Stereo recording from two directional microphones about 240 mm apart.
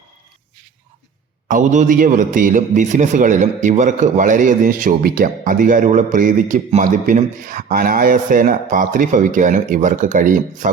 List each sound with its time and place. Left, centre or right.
1.5 s a man's voice: right